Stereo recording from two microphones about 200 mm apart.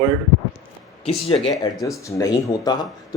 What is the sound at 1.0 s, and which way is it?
Speech, 25° left (ahead or behind).